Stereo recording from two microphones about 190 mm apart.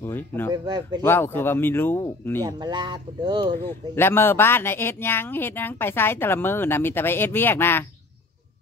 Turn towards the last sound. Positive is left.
turn(degrees=10)  # may be behind; listen again after turning